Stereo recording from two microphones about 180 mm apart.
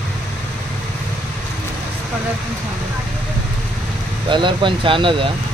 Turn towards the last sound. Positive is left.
turn(degrees=-30)  # may be behind; listen again after turning